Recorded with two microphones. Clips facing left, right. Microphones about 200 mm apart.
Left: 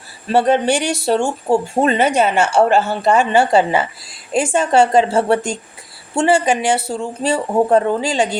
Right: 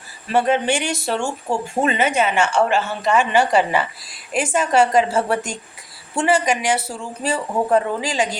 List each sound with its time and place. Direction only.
0.3 s speech: 35° left (ahead or behind)